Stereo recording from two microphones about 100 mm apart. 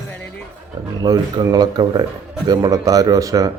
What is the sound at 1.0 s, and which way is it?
A man's voice, 40° right (ahead or behind).